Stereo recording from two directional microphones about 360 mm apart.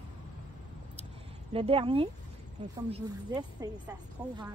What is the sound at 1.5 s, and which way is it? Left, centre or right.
A woman's voice, centre.